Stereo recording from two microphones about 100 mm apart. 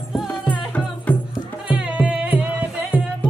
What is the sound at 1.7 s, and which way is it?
Music, 10° right (ahead or behind).